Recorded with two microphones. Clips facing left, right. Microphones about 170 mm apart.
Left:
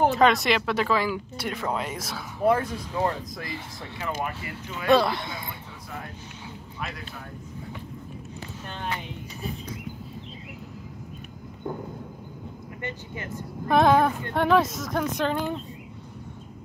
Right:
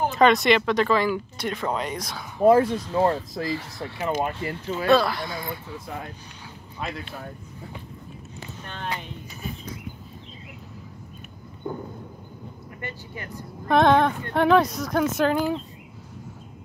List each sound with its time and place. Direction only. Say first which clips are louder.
0.1 s speech: right 3 dB; centre (ahead or behind)
2.5 s speech: right 7 dB; 25° right (ahead or behind)
4.8 s speech: even; 20° left (ahead or behind)
12.8 s speech: left 1 dB; 20° left (ahead or behind)
13.7 s speech: right 1 dB; 5° left (ahead or behind)